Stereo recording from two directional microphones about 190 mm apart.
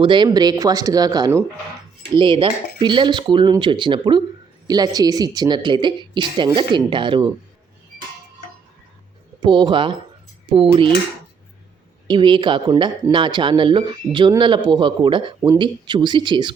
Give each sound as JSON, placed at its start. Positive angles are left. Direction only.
{"t": 0.0, "sound": "speech", "side_deg": -25}
{"t": 9.4, "sound": "speech", "side_deg": -25}
{"t": 12.0, "sound": "speech", "side_deg": -25}